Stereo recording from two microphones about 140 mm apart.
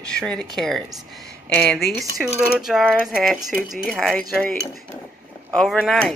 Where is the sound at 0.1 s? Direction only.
5° left (ahead or behind).